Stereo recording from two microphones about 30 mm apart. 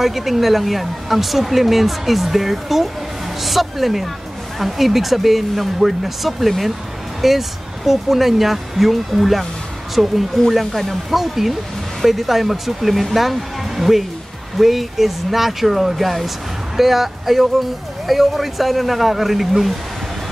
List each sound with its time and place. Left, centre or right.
0.0 s speech: centre